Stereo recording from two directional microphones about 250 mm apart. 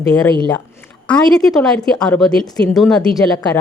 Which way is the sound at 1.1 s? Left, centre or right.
Centre.